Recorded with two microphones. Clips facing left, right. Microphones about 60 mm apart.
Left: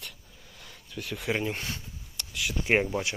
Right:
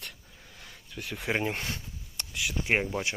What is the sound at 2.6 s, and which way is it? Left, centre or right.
Speech, centre.